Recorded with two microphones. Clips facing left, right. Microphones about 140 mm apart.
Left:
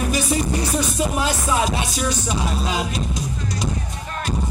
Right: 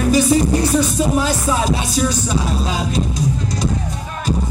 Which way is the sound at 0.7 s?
35° right (ahead or behind).